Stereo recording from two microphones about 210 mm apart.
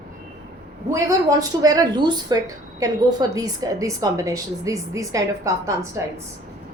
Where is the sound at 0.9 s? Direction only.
15° right (ahead or behind).